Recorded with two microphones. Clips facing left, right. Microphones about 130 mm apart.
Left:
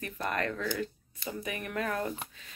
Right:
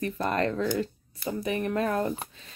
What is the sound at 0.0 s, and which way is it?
A woman's voice, 30° right (ahead or behind).